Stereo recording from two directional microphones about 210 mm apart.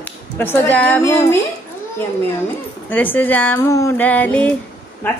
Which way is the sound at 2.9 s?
10° left (ahead or behind).